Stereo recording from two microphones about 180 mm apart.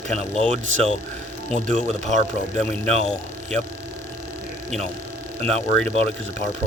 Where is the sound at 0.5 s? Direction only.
35° right (ahead or behind).